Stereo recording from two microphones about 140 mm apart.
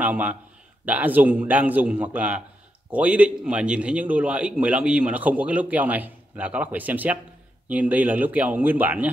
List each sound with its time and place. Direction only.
0.0 s a man's voice: 10° right (ahead or behind)